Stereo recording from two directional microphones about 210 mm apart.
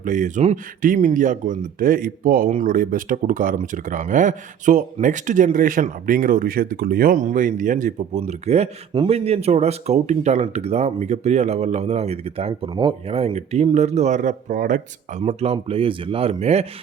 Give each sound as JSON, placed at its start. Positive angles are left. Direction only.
{"t": 0.0, "sound": "speech", "side_deg": -35}